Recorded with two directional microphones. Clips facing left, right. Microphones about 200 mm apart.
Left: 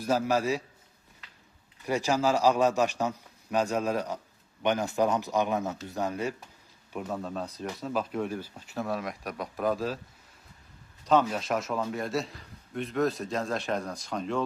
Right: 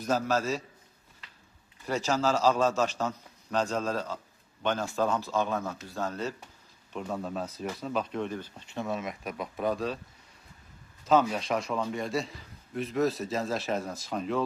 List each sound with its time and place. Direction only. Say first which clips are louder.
0.0 s a man's voice: left 2 dB; 10° left (ahead or behind)
1.8 s a man's voice: left 2 dB; 15° left (ahead or behind)
11.0 s a man's voice: even; centre (ahead or behind)